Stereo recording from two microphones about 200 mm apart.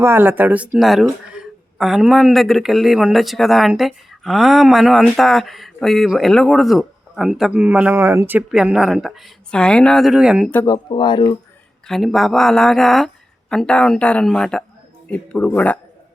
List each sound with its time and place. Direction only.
0.0 s speech: 10° right (ahead or behind)
10.5 s speech: 10° left (ahead or behind)
10.8 s speech: 20° left (ahead or behind)
11.9 s speech: centre (ahead or behind)